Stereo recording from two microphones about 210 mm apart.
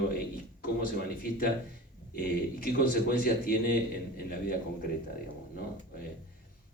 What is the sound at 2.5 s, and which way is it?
Speech, 45° left (ahead or behind).